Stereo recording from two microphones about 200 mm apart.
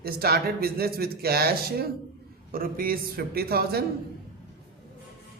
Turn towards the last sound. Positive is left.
turn(degrees=-50)  # may be behind; listen again after turning